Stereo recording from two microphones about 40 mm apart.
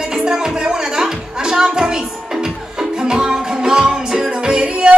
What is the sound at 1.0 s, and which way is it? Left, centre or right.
Music, centre.